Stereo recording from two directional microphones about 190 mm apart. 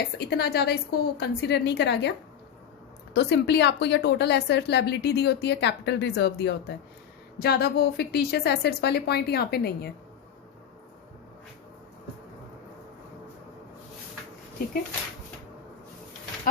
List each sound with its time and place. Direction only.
0.2 s a woman's voice: 60° left (ahead or behind)
3.2 s a woman's voice: 60° left (ahead or behind)